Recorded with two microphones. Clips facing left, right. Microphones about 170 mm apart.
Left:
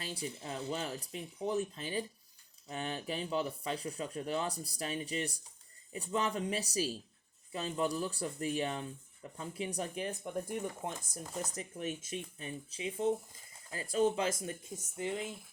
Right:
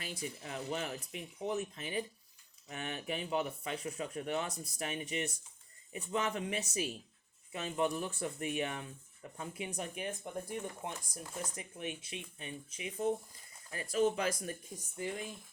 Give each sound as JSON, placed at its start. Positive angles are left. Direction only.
{"t": 0.0, "sound": "speech", "side_deg": 30}
{"t": 13.9, "sound": "speech", "side_deg": 25}